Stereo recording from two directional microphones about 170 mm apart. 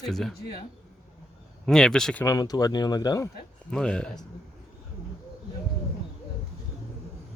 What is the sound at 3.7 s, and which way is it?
Speech, 5° left (ahead or behind).